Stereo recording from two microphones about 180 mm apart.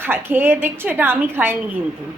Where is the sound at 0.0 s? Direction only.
10° right (ahead or behind).